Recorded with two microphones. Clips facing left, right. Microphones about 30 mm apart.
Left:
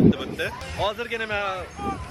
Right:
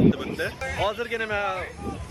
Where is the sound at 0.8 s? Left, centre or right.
Centre.